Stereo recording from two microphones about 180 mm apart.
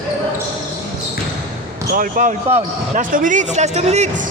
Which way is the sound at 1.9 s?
50° right (ahead or behind).